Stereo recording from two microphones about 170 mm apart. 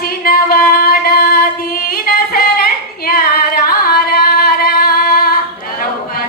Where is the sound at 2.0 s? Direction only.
60° left (ahead or behind).